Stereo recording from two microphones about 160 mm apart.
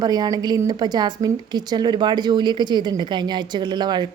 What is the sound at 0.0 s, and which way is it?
A woman's voice, 25° right (ahead or behind).